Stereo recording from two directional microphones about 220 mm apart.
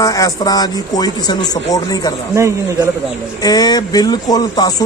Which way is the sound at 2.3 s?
15° right (ahead or behind).